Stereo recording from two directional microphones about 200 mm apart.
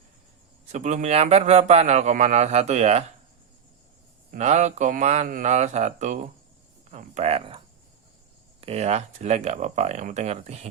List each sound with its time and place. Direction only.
0.7 s a man's voice: 35° right (ahead or behind)
4.3 s a man's voice: 35° right (ahead or behind)
8.6 s a man's voice: 30° right (ahead or behind)